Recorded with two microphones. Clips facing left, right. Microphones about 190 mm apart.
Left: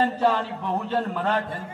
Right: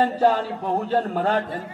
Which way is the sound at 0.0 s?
40° right (ahead or behind).